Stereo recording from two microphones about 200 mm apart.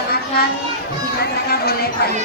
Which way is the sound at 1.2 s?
50° left (ahead or behind).